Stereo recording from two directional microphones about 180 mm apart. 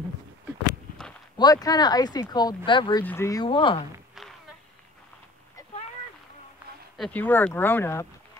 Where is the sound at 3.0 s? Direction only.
10° left (ahead or behind).